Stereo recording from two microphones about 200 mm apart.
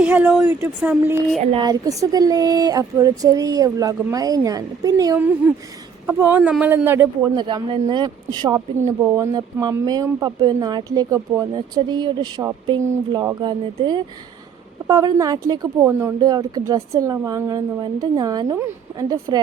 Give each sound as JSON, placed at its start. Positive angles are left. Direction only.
{"t": 0.0, "sound": "speech", "side_deg": -5}
{"t": 1.5, "sound": "speech", "side_deg": -20}
{"t": 7.3, "sound": "speech", "side_deg": -25}